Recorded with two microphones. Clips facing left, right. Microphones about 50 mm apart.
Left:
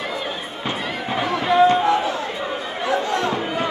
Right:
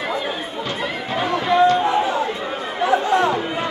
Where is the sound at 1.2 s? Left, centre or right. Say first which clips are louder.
Even; centre.